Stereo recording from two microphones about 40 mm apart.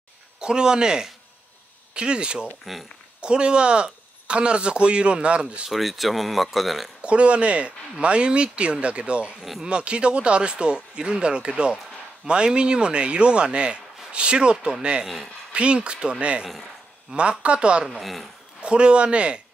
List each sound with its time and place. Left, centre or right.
0.4 s speech: centre
2.7 s speech: centre
3.2 s speech: right
5.7 s speech: centre
7.0 s speech: right
9.4 s speech: centre
9.7 s speech: right
18.0 s speech: centre
18.6 s speech: right